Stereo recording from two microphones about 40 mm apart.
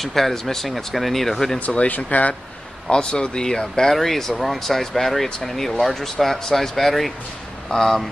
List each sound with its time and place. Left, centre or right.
0.0 s speech: centre
1.9 s speech: left
2.9 s speech: left